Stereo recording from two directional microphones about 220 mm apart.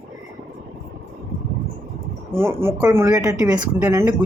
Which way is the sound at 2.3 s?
10° right (ahead or behind).